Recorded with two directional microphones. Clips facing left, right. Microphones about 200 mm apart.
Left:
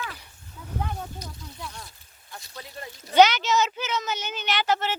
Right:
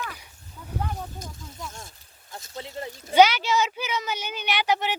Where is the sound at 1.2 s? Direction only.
45° right (ahead or behind).